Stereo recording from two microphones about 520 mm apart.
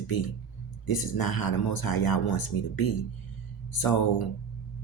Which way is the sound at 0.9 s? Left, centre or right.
Left.